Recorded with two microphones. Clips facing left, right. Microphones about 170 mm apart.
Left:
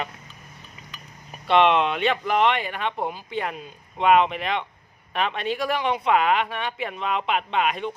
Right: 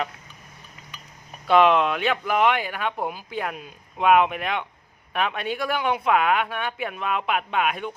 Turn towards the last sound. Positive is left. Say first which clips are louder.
# left 1 dB
turn(degrees=-5)  # may be behind; listen again after turning